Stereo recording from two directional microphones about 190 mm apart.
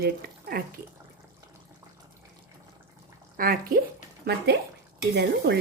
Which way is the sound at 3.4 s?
50° right (ahead or behind).